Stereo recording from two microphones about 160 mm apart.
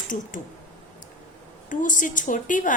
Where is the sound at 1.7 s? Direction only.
55° left (ahead or behind).